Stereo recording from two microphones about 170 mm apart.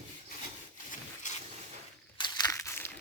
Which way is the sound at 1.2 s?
45° left (ahead or behind).